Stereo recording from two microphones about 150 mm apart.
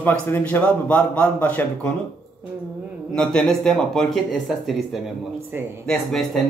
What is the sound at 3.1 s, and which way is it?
Speech, 5° left (ahead or behind).